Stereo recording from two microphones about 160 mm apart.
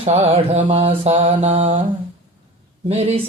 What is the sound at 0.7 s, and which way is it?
Music, 35° right (ahead or behind).